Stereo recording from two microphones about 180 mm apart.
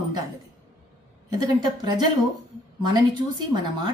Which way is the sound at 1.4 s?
20° right (ahead or behind).